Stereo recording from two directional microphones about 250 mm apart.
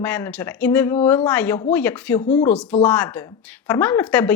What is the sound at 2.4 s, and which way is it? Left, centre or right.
A woman's voice, centre.